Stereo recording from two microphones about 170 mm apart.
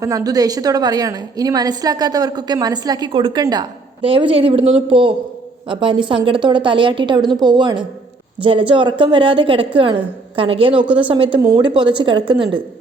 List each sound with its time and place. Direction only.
0.0 s a woman's voice: 20° right (ahead or behind)